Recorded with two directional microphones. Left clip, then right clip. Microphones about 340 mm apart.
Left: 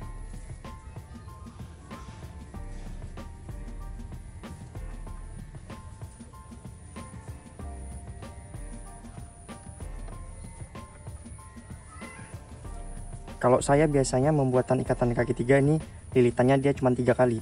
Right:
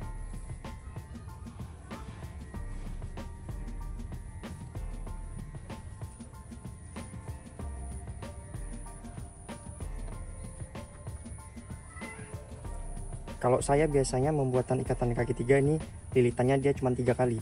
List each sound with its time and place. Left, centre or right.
0.0 s music: centre
3.2 s music: centre
13.4 s speech: left